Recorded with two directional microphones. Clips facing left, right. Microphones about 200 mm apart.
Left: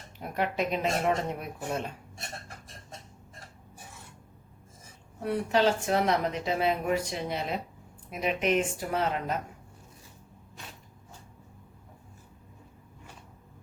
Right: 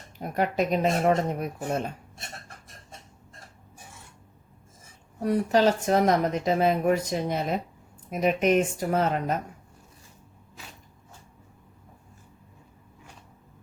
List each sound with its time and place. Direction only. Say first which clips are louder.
0.2 s speech: right 4 dB; 40° right (ahead or behind)
5.2 s a woman's voice: right 4 dB; 40° right (ahead or behind)